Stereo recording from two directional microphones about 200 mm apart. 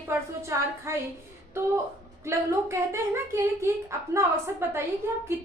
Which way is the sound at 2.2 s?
15° right (ahead or behind).